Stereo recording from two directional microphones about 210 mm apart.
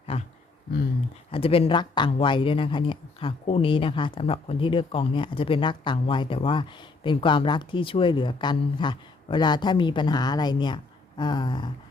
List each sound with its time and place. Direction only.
1.3 s speech: 25° left (ahead or behind)